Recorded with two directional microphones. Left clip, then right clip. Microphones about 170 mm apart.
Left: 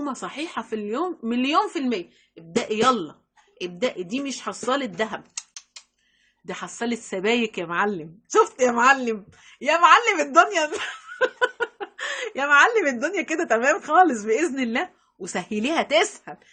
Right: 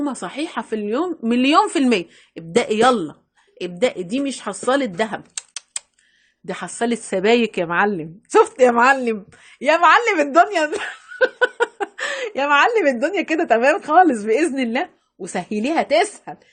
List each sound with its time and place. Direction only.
0.0 s a woman's voice: 30° right (ahead or behind); by 2.4 s 60° right (ahead or behind)
2.6 s a woman's voice: 40° right (ahead or behind); by 16.4 s 20° right (ahead or behind)